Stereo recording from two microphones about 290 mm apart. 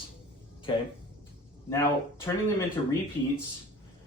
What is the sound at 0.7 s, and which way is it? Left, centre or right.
Speech, centre.